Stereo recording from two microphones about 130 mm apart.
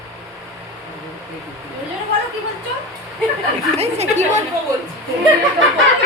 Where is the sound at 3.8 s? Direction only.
60° right (ahead or behind).